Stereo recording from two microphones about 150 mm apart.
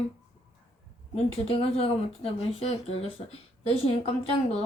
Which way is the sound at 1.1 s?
40° left (ahead or behind).